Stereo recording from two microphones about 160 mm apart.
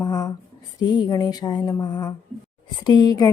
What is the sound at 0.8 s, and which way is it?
Speech, 25° left (ahead or behind).